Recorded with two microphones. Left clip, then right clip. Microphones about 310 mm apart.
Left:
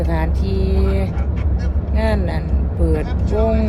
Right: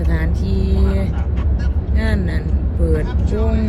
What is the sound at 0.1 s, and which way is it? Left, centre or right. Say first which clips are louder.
Music: left 2 dB; centre.